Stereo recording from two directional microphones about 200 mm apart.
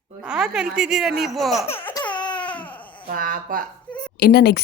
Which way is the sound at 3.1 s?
45° right (ahead or behind).